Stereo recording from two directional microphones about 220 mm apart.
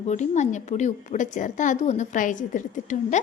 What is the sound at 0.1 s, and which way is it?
A woman's voice, 35° left (ahead or behind).